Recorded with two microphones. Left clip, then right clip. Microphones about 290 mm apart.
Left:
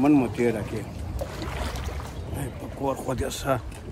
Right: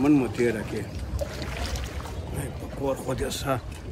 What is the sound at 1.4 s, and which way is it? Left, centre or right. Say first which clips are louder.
Boat: left 1 dB; left.